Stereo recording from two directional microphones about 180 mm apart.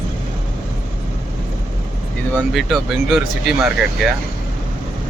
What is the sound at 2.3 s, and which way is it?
Speech, centre (ahead or behind).